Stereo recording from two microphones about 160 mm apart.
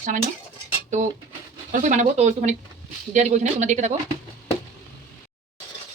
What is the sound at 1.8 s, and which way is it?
A woman's voice, 50° right (ahead or behind).